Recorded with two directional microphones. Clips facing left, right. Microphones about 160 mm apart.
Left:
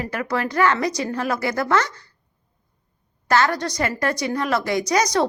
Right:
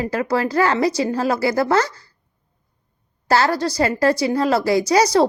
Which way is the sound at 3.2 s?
35° right (ahead or behind).